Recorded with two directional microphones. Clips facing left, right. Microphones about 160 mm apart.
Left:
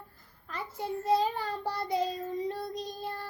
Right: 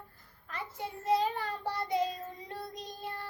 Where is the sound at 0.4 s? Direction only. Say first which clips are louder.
Left 4 dB; 35° left (ahead or behind).